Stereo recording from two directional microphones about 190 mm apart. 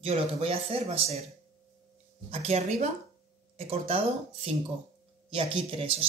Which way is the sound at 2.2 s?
35° right (ahead or behind).